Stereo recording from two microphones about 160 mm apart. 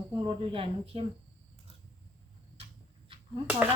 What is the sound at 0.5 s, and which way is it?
Speech, 35° right (ahead or behind).